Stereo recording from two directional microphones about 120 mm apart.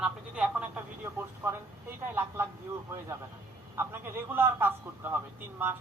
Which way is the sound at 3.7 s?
20° right (ahead or behind).